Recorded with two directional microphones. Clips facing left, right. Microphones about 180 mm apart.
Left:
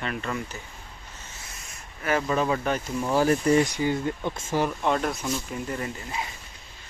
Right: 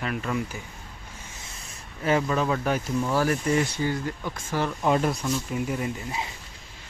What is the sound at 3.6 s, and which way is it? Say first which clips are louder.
Speech: left 2 dB; 15° left (ahead or behind).